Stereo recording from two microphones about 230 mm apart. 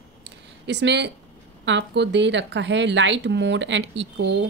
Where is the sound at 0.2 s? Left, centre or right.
Right.